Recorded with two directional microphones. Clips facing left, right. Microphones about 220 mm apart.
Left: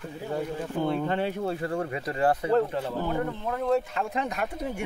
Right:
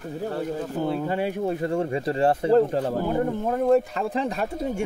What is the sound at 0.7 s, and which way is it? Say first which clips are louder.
Speech: even; 5° right (ahead or behind).